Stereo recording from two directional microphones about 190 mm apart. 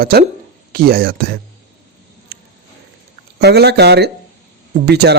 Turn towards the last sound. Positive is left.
turn(degrees=-60)  # may be behind; listen again after turning